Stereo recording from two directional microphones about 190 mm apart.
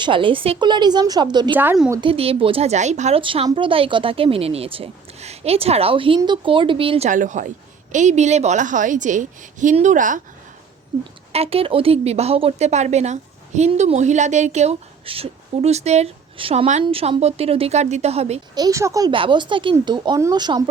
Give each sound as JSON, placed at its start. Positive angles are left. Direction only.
{"t": 0.0, "sound": "a woman's voice", "side_deg": -25}
{"t": 1.5, "sound": "a woman's voice", "side_deg": -5}
{"t": 1.9, "sound": "a woman's voice", "side_deg": -25}
{"t": 7.1, "sound": "a woman's voice", "side_deg": -40}
{"t": 11.3, "sound": "a woman's voice", "side_deg": -30}
{"t": 18.5, "sound": "a woman's voice", "side_deg": -20}